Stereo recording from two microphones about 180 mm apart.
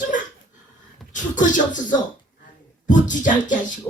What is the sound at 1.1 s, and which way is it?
Speech, 45° left (ahead or behind).